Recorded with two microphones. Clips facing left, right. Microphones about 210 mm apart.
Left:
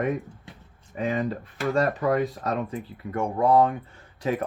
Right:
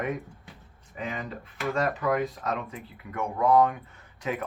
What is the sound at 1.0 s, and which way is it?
Speech, 40° left (ahead or behind).